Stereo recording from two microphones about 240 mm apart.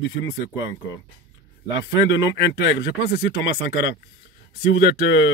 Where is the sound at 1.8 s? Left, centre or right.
Left.